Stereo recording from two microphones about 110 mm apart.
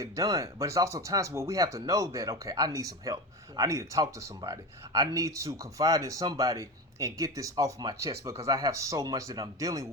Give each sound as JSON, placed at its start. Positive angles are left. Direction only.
{"t": 0.0, "sound": "speech", "side_deg": -30}